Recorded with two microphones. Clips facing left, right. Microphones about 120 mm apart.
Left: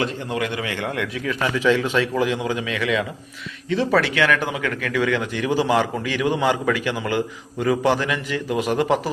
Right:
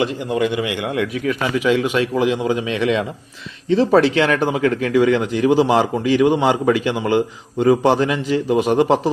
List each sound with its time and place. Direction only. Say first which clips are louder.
0.3 s a man's voice: right 6 dB; 15° right (ahead or behind)